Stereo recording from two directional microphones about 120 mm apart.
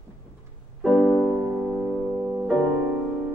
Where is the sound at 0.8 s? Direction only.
Centre (ahead or behind).